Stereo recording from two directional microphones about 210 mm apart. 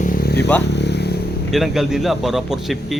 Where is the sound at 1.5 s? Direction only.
Centre (ahead or behind).